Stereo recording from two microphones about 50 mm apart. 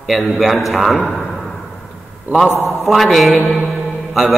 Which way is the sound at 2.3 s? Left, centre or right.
Right.